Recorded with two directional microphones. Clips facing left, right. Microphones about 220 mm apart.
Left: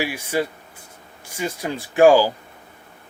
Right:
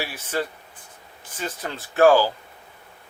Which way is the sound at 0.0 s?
10° left (ahead or behind).